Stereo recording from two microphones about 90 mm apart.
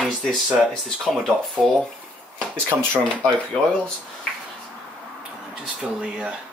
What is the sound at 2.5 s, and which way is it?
Speech, 25° right (ahead or behind).